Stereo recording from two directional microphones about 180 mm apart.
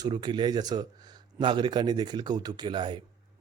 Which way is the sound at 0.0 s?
25° right (ahead or behind).